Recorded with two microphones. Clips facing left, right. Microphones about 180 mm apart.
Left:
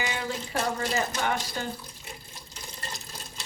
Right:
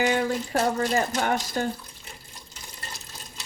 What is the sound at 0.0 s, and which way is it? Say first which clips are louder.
Water tap: right 8 dB; 50° right (ahead or behind).